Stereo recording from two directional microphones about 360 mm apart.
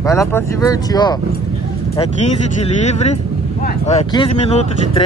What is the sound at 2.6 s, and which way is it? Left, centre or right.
Speech, centre.